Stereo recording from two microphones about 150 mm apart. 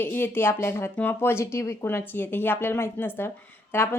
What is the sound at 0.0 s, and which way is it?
Speech, 15° left (ahead or behind).